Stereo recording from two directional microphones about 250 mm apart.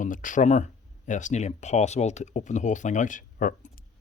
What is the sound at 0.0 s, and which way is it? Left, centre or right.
Speech, left.